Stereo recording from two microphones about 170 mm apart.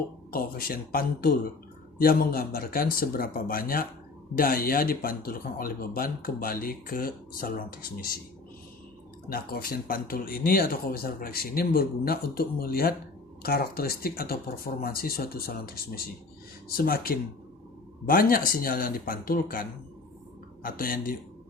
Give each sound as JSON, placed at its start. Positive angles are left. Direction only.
{"t": 0.3, "sound": "speech", "side_deg": 60}
{"t": 9.3, "sound": "speech", "side_deg": 60}
{"t": 16.7, "sound": "speech", "side_deg": 60}